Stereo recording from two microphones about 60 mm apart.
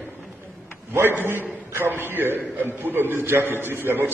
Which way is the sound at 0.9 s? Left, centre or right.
Right.